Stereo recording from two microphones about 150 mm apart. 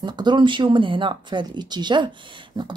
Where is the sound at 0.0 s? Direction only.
30° right (ahead or behind).